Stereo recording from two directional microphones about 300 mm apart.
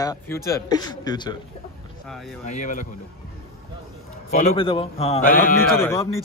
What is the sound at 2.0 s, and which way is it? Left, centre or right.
Speech, centre.